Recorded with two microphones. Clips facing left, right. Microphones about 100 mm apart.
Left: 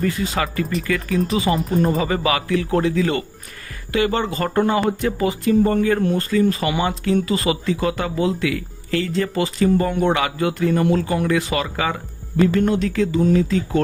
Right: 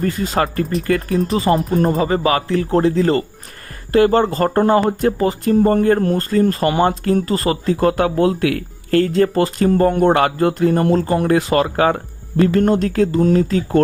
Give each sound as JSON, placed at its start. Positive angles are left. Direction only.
{"t": 0.0, "sound": "speech", "side_deg": -45}